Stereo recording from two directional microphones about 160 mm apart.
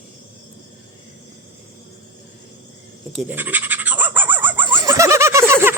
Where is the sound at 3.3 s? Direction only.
10° right (ahead or behind).